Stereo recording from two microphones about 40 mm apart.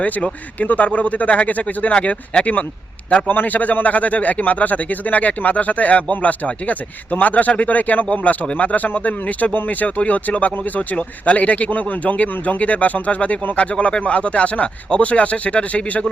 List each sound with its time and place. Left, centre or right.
0.0 s a man's voice: left
1.9 s a man's voice: left
3.2 s a man's voice: left